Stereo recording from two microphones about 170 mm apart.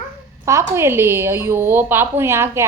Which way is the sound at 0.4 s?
15° right (ahead or behind).